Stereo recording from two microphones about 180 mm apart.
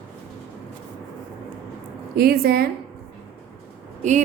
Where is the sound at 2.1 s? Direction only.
60° right (ahead or behind).